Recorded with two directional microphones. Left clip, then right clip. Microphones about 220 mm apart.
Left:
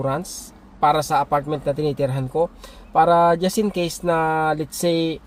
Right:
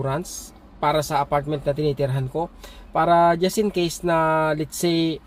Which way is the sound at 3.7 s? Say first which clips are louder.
Left 1 dB; 40° left (ahead or behind).